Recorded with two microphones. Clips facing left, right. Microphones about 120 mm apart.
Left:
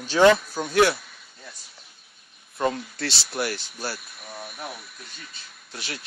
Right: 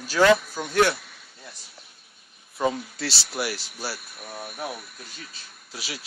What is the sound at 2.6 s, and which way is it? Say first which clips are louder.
Speech: even; 5° right (ahead or behind).